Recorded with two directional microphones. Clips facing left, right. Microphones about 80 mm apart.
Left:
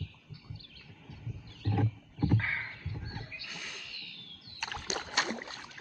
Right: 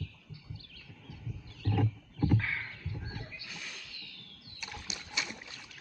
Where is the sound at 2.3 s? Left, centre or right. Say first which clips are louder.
Left 1 dB; left.